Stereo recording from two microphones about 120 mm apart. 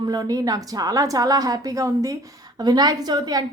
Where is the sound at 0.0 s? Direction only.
35° right (ahead or behind).